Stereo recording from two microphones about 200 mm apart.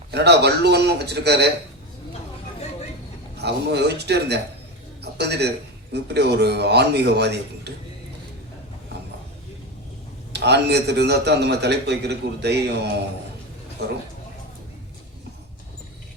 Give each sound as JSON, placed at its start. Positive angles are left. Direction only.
{"t": 0.1, "sound": "a man's voice", "side_deg": -55}
{"t": 3.3, "sound": "a man's voice", "side_deg": -55}
{"t": 10.3, "sound": "a man's voice", "side_deg": -55}
{"t": 13.8, "sound": "a man's voice", "side_deg": -55}